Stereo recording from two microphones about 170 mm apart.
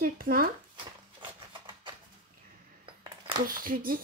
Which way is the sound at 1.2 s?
30° right (ahead or behind).